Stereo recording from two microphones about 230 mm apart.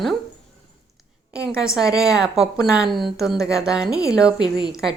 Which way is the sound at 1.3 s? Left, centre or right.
Centre.